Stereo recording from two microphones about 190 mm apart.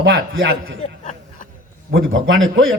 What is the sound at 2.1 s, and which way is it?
Speech, 90° right.